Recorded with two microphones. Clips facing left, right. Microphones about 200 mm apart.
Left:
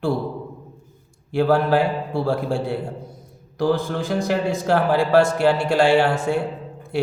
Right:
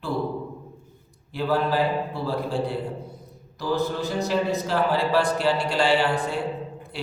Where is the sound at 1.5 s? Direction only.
75° left (ahead or behind).